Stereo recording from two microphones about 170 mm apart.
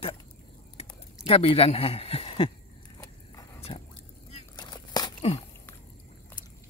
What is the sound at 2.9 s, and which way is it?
Biting, 20° left (ahead or behind).